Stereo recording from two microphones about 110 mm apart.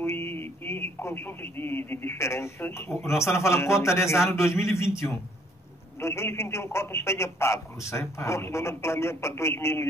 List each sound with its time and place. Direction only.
0.0 s a man's voice: 20° left (ahead or behind)
2.9 s speech: centre (ahead or behind)
3.2 s speech: 25° left (ahead or behind)